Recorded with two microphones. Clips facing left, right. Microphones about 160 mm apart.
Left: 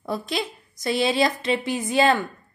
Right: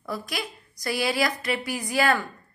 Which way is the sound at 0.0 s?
25° left (ahead or behind).